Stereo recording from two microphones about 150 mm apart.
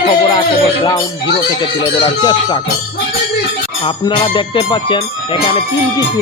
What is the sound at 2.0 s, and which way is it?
Speech, 30° left (ahead or behind).